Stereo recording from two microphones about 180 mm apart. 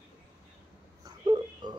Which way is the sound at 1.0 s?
25° right (ahead or behind).